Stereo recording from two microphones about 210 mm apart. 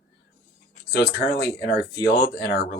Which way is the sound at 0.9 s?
50° left (ahead or behind).